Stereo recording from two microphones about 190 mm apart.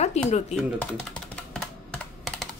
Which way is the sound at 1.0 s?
5° left (ahead or behind).